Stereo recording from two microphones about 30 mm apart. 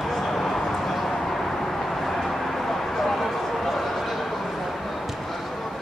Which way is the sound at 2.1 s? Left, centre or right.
Centre.